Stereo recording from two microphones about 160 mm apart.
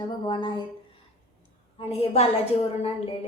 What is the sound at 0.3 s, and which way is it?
Speech, 30° left (ahead or behind).